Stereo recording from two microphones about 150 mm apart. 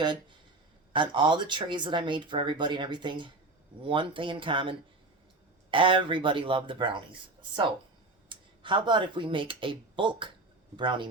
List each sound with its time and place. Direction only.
0.9 s speech: 35° right (ahead or behind)